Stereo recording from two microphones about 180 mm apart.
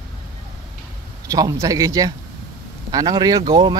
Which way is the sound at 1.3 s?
20° right (ahead or behind).